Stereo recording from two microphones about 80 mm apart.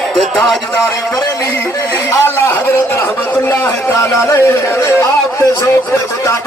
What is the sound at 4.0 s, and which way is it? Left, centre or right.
Speech, left.